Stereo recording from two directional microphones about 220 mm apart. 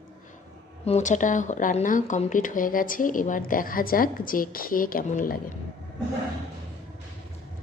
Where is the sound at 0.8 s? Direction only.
30° left (ahead or behind).